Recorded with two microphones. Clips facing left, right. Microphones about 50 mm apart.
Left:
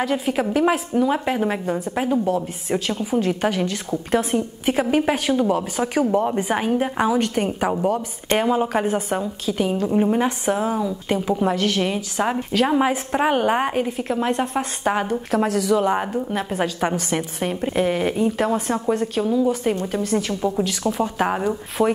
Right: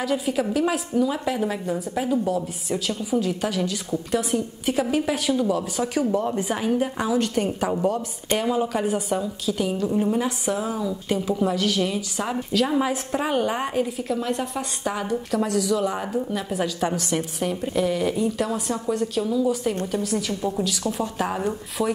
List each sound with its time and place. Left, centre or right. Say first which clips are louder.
0.0 s a woman's voice: left 2 dB; left
9.9 s a woman's voice: left 6 dB; left
11.4 s a woman's voice: left 1 dB; left
21.8 s speech: left 5 dB; left